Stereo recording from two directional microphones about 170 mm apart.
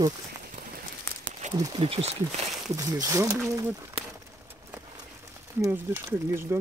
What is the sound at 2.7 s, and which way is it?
Speech, 20° right (ahead or behind).